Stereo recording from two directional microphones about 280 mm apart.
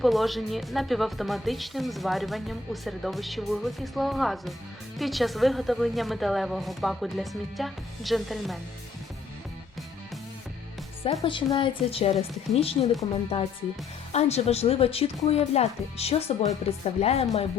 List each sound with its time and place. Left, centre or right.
0.0 s speech: centre
11.0 s speech: left
14.1 s speech: left